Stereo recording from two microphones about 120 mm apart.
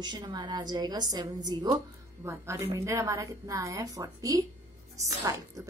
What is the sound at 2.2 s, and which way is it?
A woman's voice, 20° right (ahead or behind).